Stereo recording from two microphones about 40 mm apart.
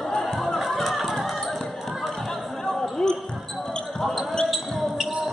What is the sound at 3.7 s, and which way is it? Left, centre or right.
Basketball bounce, centre.